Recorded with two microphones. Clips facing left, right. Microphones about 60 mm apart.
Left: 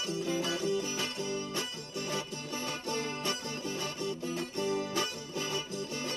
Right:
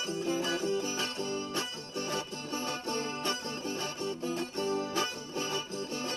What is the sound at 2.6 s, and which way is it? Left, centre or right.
Music, right.